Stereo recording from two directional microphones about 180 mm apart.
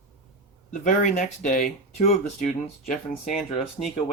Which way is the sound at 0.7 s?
45° left (ahead or behind).